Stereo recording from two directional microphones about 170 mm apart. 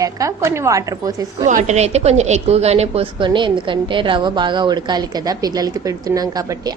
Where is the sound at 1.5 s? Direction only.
45° right (ahead or behind).